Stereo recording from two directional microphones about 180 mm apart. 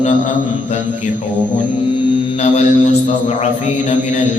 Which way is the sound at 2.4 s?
40° left (ahead or behind).